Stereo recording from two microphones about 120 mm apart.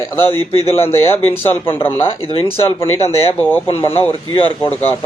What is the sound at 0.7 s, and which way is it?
Speech, 20° left (ahead or behind).